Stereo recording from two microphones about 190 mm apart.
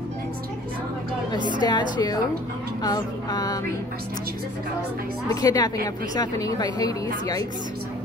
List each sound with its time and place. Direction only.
1.6 s a woman's voice: 25° left (ahead or behind)
5.3 s a woman's voice: 20° left (ahead or behind)